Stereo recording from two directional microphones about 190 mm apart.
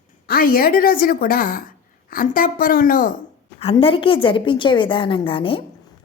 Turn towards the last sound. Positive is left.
turn(degrees=30)  # may be behind; listen again after turning